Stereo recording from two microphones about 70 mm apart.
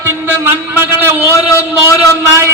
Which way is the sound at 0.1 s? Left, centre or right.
Right.